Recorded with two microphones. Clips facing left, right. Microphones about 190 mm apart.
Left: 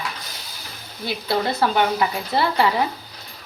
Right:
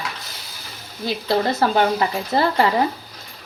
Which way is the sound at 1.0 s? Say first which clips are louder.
Right 3 dB; 40° right (ahead or behind).